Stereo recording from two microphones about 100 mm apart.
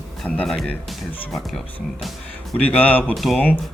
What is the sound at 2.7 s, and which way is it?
Speech, 15° left (ahead or behind).